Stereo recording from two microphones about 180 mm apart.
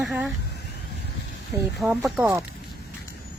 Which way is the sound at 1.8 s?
Centre (ahead or behind).